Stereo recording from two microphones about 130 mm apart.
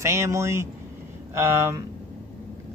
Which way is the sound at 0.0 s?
20° right (ahead or behind).